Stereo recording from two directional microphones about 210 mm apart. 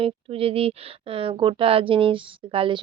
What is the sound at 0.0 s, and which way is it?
Speech, 25° right (ahead or behind).